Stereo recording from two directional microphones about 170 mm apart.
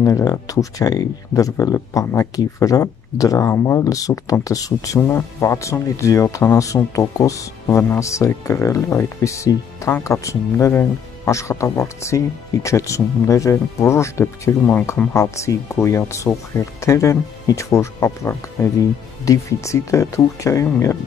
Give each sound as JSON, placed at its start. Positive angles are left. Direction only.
{"t": 0.0, "sound": "speech", "side_deg": 20}